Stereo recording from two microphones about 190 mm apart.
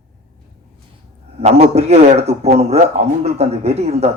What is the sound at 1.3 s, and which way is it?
A man's voice, 35° right (ahead or behind).